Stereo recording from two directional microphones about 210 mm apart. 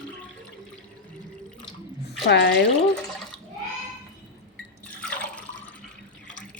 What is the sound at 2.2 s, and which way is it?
Speech, 55° left (ahead or behind).